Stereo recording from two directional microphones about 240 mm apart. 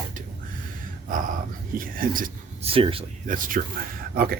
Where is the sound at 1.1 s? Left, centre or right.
Right.